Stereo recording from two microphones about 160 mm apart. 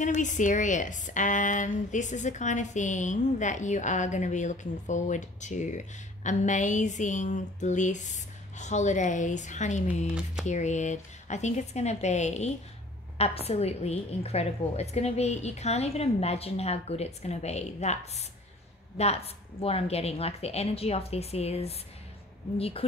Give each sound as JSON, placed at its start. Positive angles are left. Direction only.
{"t": 0.0, "sound": "a woman's voice", "side_deg": 50}